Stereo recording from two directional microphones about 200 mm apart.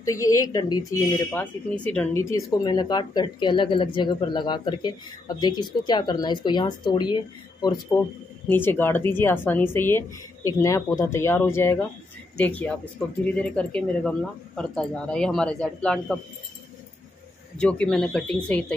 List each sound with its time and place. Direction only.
0.0 s speech: 15° left (ahead or behind)
8.5 s speech: 10° left (ahead or behind)
17.6 s speech: 5° left (ahead or behind)